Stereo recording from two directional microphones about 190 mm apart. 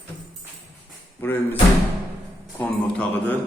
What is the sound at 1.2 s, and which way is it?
Speech, 10° left (ahead or behind).